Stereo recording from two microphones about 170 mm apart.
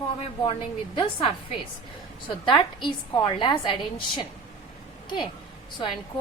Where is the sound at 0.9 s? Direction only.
30° left (ahead or behind).